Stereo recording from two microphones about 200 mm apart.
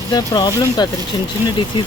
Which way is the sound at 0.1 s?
20° left (ahead or behind).